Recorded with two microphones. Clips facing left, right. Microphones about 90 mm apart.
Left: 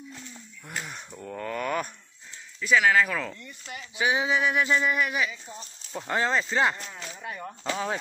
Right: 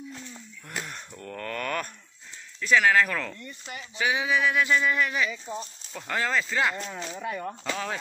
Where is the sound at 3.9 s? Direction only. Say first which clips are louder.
Left 1 dB; 20° left (ahead or behind).